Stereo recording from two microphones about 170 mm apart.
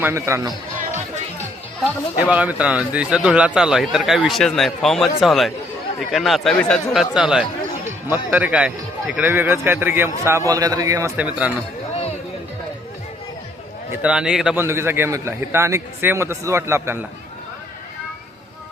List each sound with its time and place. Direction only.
0.0 s a man's voice: 15° right (ahead or behind)
1.8 s a man's voice: 5° right (ahead or behind)
13.9 s speech: 5° right (ahead or behind)
14.6 s a man's voice: 15° right (ahead or behind)